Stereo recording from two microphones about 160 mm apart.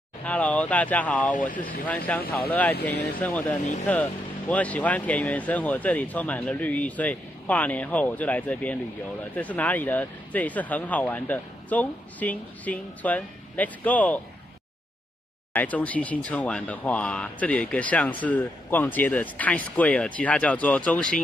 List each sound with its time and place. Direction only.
0.2 s speech: 10° left (ahead or behind)
1.5 s speech: 60° left (ahead or behind)
1.9 s speech: 10° left (ahead or behind)
15.5 s speech: 10° left (ahead or behind)